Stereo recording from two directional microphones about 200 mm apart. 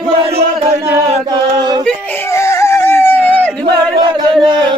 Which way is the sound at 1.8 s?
10° left (ahead or behind).